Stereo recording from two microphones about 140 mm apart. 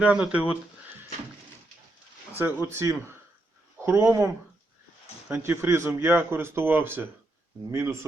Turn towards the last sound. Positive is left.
turn(degrees=-20)  # may be behind; listen again after turning